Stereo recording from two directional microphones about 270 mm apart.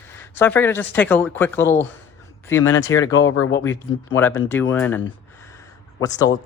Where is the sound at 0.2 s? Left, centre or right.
Centre.